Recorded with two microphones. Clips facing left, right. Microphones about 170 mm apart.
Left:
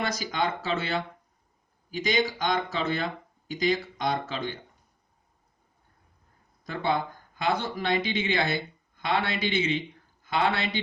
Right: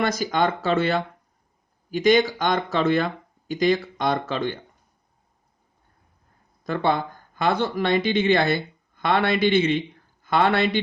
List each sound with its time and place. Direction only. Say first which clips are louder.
0.0 s speech: right 6 dB; 50° right (ahead or behind)
7.3 s speech: right 6 dB; 65° right (ahead or behind)